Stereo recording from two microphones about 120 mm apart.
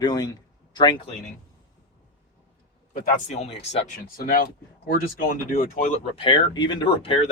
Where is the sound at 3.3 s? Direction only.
65° left (ahead or behind).